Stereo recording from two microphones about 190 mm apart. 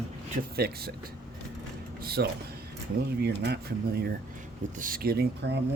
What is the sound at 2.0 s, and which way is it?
Speech, 55° right (ahead or behind).